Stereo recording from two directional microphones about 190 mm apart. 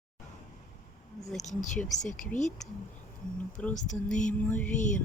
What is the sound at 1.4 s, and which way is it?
Speech, 40° left (ahead or behind).